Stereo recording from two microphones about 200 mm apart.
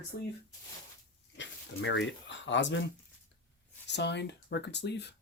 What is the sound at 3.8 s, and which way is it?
Speech, 60° left (ahead or behind).